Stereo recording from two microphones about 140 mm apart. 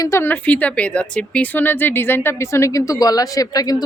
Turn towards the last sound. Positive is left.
turn(degrees=25)  # may be behind; listen again after turning